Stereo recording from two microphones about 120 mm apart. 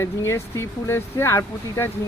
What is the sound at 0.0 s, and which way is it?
Speech, 25° left (ahead or behind).